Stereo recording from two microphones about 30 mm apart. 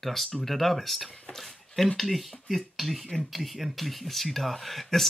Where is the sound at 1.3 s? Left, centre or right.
Centre.